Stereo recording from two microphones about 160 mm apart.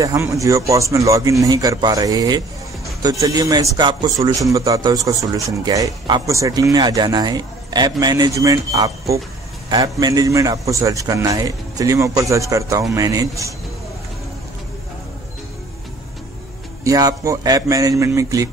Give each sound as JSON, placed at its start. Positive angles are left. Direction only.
{"t": 0.0, "sound": "speech", "side_deg": -20}
{"t": 16.8, "sound": "speech", "side_deg": -20}